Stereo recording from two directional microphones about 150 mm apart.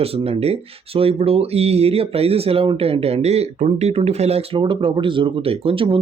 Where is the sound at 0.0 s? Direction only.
40° right (ahead or behind).